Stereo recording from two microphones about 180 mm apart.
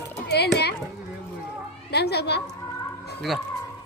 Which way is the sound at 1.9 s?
65° left (ahead or behind).